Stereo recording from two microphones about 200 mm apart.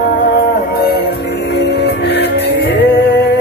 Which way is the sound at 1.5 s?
55° left (ahead or behind).